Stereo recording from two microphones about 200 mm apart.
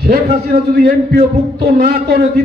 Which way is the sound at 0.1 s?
50° right (ahead or behind).